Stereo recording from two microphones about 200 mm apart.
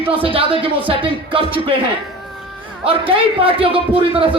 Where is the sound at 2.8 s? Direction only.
25° right (ahead or behind).